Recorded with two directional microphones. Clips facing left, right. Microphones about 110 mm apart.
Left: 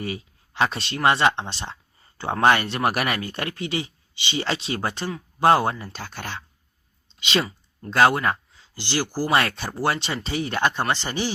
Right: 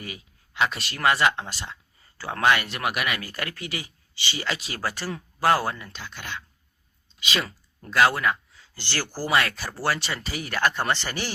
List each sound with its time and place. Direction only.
0.0 s speech: 30° left (ahead or behind)
3.2 s speech: 25° left (ahead or behind)
5.8 s speech: 45° left (ahead or behind)
7.1 s a sound: 30° left (ahead or behind)
7.9 s speech: 30° left (ahead or behind)
8.6 s speech: 15° left (ahead or behind)
9.3 s speech: 30° left (ahead or behind)